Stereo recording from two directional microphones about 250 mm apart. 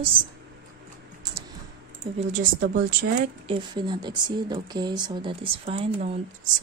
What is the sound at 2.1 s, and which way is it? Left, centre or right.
Speech, right.